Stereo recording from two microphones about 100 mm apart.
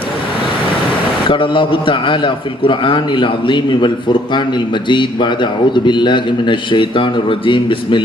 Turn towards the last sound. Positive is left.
turn(degrees=55)  # may be behind; listen again after turning